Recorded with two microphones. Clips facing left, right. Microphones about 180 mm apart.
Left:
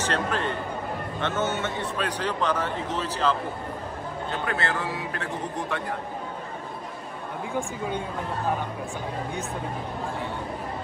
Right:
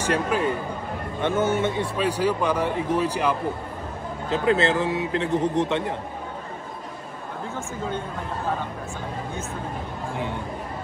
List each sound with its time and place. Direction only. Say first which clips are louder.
0.0 s speech: right 4 dB; 10° right (ahead or behind)
4.5 s a man's voice: right 10 dB; 20° right (ahead or behind)
7.5 s speech: left 2 dB; 15° left (ahead or behind)